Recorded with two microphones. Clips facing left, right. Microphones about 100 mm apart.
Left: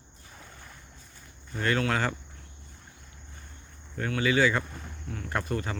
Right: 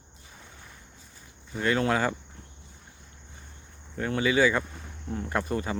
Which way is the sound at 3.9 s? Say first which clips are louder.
Right 1 dB; 20° right (ahead or behind).